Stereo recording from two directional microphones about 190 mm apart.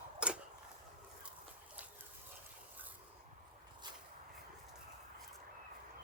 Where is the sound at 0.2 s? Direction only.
5° right (ahead or behind).